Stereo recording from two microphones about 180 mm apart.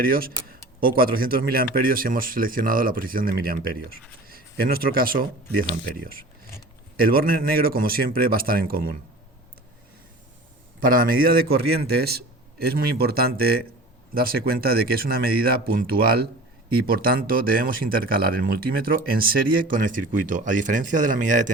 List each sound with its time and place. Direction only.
0.0 s a man's voice: 55° right (ahead or behind)
10.8 s a man's voice: 50° right (ahead or behind)